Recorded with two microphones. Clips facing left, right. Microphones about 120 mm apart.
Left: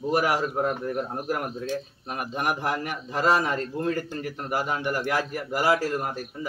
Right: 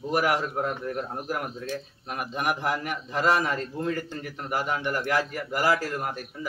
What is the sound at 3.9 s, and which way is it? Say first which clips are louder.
A man's voice: left 2 dB; 10° left (ahead or behind).